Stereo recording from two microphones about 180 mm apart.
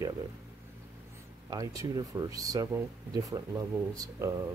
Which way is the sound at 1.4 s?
20° right (ahead or behind).